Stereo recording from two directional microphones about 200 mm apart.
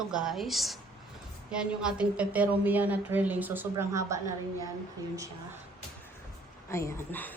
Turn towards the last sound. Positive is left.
turn(degrees=10)  # may be behind; listen again after turning